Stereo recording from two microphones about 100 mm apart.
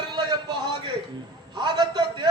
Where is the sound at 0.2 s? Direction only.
45° right (ahead or behind).